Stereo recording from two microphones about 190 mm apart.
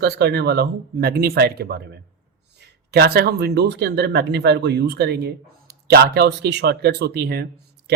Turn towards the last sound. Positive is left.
turn(degrees=-55)  # may be behind; listen again after turning